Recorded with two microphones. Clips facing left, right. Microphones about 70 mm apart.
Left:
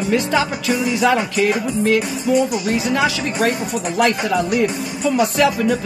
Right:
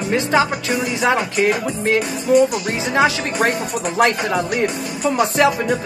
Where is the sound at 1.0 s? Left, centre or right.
Right.